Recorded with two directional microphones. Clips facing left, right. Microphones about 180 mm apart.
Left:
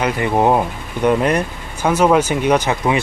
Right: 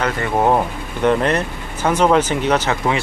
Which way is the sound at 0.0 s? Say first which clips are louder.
Left 2 dB; 15° left (ahead or behind).